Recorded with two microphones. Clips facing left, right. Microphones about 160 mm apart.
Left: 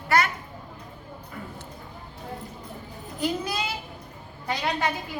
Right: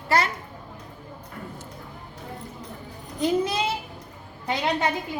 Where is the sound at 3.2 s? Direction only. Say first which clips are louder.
Right 5 dB; 25° right (ahead or behind).